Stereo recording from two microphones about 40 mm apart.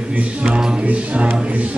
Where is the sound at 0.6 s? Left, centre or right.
Centre.